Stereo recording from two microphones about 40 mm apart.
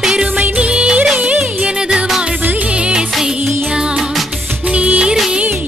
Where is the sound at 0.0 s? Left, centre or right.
Centre.